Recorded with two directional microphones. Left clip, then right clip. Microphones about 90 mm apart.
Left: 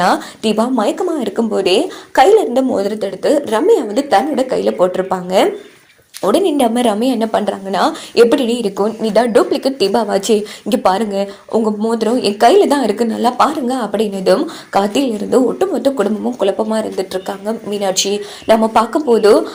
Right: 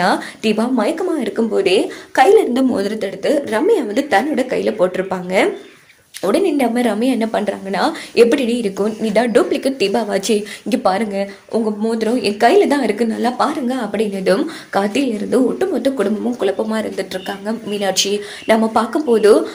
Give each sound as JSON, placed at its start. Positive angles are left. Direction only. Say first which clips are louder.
{"t": 0.0, "sound": "a woman's voice", "louder": "left 2 dB", "side_deg": 25}
{"t": 2.7, "sound": "a woman's voice", "louder": "left 3 dB", "side_deg": 0}
{"t": 3.2, "sound": "a woman's voice", "louder": "left 3 dB", "side_deg": 35}
{"t": 3.7, "sound": "a woman's voice", "louder": "left 3 dB", "side_deg": 15}
{"t": 18.4, "sound": "a woman's voice", "louder": "left 4 dB", "side_deg": 25}
{"t": 18.9, "sound": "speech", "louder": "even", "side_deg": 10}